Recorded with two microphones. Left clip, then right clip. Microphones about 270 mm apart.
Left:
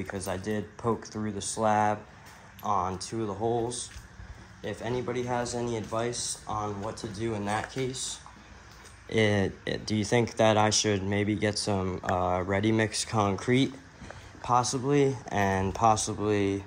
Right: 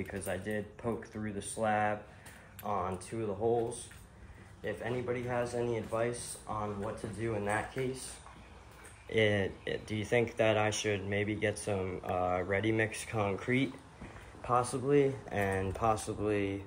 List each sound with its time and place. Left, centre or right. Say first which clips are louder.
0.3 s a man's voice: left 3 dB; left
9.1 s a man's voice: left 4 dB; centre